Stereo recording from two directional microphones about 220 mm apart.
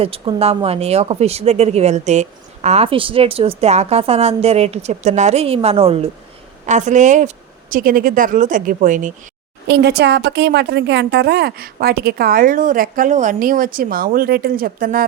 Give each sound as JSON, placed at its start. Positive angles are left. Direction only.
{"t": 0.0, "sound": "speech", "side_deg": -25}
{"t": 9.6, "sound": "a woman's voice", "side_deg": -50}